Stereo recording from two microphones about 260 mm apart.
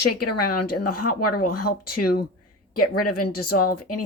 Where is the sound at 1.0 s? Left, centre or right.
Left.